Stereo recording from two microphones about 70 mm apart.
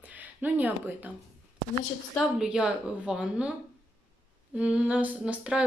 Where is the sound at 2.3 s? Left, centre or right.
Centre.